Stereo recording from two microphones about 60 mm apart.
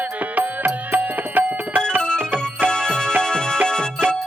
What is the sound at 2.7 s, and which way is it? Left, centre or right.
Music, centre.